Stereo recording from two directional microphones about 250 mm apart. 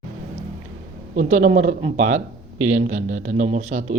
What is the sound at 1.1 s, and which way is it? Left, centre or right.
Speech, right.